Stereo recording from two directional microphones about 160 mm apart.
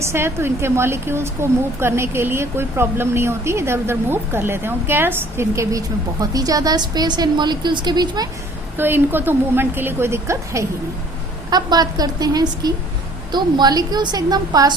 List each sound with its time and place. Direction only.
0.0 s speech: 15° right (ahead or behind)
8.8 s a woman's voice: 15° right (ahead or behind)